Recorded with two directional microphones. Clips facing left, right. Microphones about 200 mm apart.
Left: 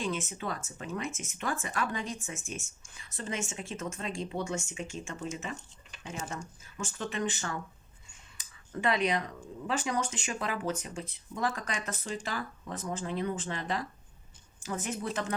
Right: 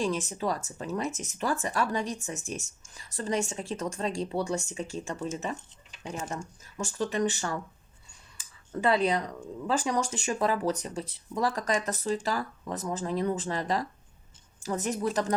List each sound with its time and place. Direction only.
0.0 s speech: 35° right (ahead or behind)
8.8 s speech: 35° right (ahead or behind)